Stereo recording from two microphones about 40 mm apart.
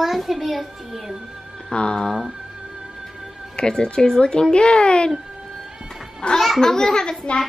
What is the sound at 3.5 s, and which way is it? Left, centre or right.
Speech, centre.